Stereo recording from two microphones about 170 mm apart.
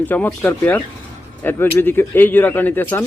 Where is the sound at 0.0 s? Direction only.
10° left (ahead or behind).